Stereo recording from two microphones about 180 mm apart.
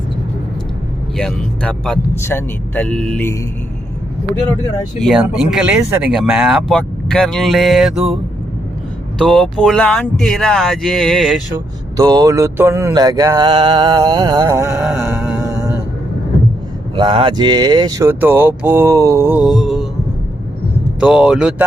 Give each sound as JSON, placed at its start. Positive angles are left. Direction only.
{"t": 1.1, "sound": "speech", "side_deg": 5}
{"t": 5.0, "sound": "speech", "side_deg": -5}
{"t": 5.8, "sound": "speech", "side_deg": -15}
{"t": 6.1, "sound": "speech", "side_deg": 0}
{"t": 9.2, "sound": "speech", "side_deg": 0}
{"t": 11.5, "sound": "speech", "side_deg": -20}
{"t": 16.9, "sound": "speech", "side_deg": -30}
{"t": 21.0, "sound": "speech", "side_deg": -5}